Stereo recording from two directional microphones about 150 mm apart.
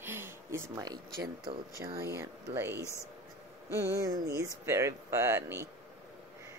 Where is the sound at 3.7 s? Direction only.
20° right (ahead or behind).